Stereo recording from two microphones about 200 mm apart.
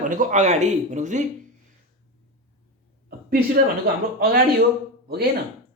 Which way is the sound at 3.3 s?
50° right (ahead or behind).